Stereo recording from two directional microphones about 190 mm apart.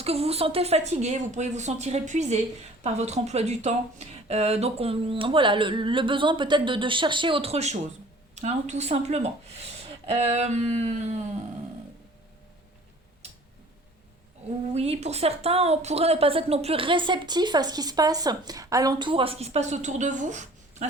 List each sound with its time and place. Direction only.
0.0 s a woman's voice: 30° right (ahead or behind)
14.7 s a woman's voice: 35° right (ahead or behind)